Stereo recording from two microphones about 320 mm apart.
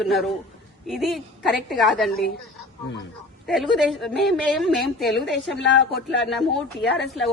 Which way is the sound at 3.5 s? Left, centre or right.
Centre.